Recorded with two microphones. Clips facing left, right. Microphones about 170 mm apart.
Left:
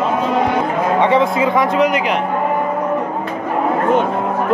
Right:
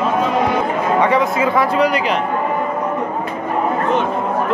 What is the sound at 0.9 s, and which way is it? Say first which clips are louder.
Music: left 2 dB; 25° left (ahead or behind).